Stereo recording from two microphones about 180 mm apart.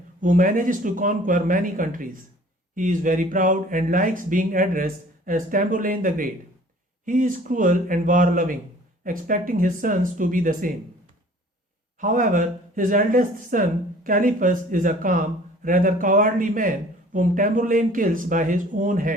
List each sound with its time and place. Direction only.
0.2 s speech: 50° right (ahead or behind)
11.9 s speech: 45° right (ahead or behind)